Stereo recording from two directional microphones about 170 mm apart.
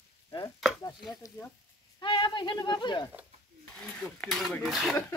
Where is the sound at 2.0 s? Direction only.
25° left (ahead or behind).